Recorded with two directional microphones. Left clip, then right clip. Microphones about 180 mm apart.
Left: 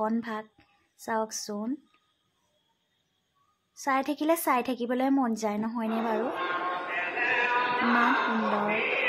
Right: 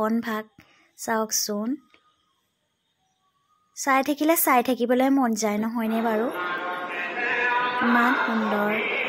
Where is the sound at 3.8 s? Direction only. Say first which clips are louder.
Right 6 dB; 20° right (ahead or behind).